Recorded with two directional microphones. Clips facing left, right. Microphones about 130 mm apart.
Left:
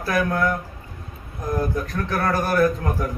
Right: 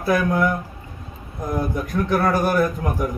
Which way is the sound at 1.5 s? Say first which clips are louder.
Right 2 dB; 15° right (ahead or behind).